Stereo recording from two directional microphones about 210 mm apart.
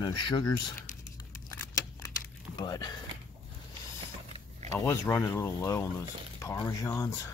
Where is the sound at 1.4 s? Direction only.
15° left (ahead or behind).